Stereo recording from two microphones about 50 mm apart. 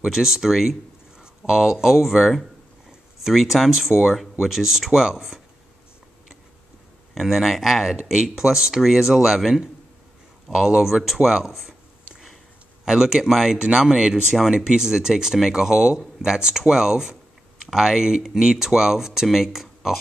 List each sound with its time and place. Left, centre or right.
0.0 s speech: centre
2.9 s a sound: centre
3.4 s speech: centre
7.2 s speech: centre
10.5 s speech: centre
11.4 s a sound: centre
12.8 s speech: centre